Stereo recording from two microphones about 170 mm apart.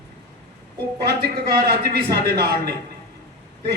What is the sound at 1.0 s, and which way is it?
A man's voice, 70° right (ahead or behind).